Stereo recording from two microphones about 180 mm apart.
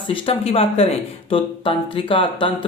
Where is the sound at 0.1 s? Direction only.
30° left (ahead or behind).